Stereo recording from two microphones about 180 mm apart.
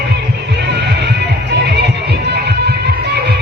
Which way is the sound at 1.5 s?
70° right (ahead or behind).